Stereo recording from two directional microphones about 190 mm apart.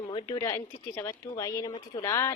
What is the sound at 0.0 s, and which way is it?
Speech, 25° left (ahead or behind).